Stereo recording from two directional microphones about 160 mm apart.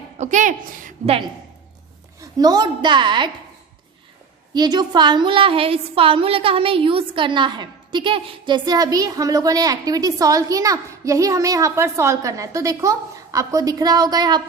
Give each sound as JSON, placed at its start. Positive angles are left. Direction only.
{"t": 0.2, "sound": "a woman's voice", "side_deg": -50}
{"t": 2.2, "sound": "a woman's voice", "side_deg": -25}
{"t": 4.5, "sound": "a woman's voice", "side_deg": -25}